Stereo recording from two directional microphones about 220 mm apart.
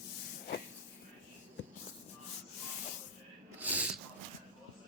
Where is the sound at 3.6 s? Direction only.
5° right (ahead or behind).